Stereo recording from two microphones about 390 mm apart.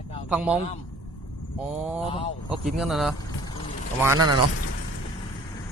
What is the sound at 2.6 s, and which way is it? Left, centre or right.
Speech, centre.